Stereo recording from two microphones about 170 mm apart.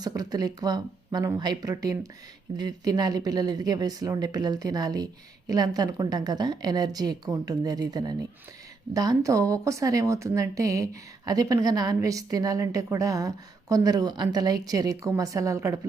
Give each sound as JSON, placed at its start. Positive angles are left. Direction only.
{"t": 0.0, "sound": "a woman's voice", "side_deg": -20}